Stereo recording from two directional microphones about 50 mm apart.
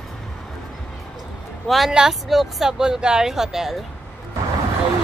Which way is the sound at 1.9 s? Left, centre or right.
Centre.